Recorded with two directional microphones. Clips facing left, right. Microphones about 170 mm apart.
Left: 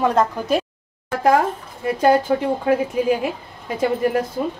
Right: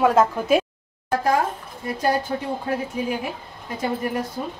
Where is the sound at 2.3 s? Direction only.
80° left.